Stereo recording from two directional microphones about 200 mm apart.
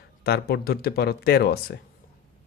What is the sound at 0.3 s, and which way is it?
Speech, 50° left (ahead or behind).